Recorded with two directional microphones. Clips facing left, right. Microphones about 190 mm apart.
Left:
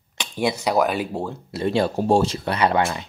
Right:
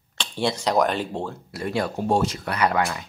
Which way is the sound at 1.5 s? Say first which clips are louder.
Left 6 dB; 25° left (ahead or behind).